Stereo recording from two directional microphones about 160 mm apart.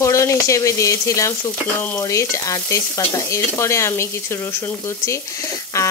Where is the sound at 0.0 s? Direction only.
20° left (ahead or behind).